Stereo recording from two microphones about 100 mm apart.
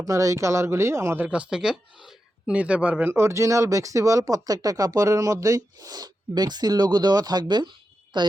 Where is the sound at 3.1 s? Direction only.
25° right (ahead or behind).